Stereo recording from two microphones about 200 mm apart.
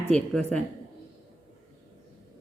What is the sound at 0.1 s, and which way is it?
Speech, 5° left (ahead or behind).